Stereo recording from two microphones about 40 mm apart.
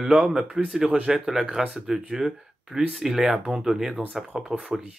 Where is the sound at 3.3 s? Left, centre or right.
Right.